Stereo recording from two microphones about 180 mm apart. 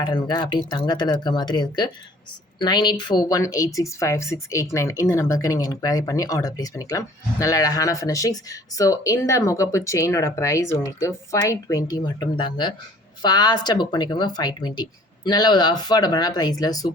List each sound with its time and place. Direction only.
0.0 s speech: 25° left (ahead or behind)